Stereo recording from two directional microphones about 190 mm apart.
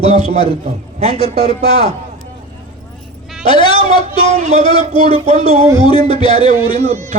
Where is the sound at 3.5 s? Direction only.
25° left (ahead or behind).